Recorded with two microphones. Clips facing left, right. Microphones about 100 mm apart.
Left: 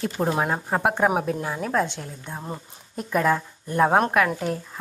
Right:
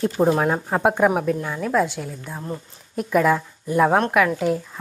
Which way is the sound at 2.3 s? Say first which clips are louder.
Right 2 dB; 20° left (ahead or behind).